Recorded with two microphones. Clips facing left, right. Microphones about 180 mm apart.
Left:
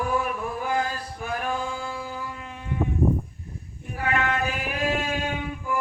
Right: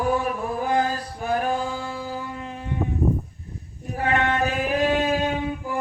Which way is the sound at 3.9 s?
35° right (ahead or behind).